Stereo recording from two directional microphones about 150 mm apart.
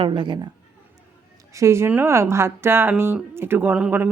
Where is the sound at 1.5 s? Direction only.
20° right (ahead or behind).